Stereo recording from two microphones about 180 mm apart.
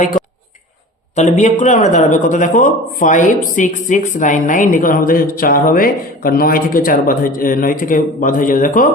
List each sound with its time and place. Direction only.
1.1 s speech: 40° left (ahead or behind)